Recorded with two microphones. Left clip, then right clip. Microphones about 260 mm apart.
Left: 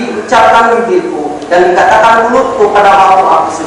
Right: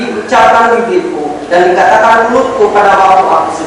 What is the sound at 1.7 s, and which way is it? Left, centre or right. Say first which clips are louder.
Speech: left 1 dB; centre.